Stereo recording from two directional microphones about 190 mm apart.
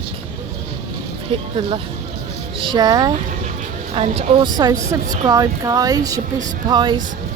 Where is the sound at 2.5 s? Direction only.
25° right (ahead or behind).